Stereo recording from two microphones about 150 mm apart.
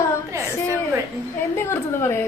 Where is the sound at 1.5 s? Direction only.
15° left (ahead or behind).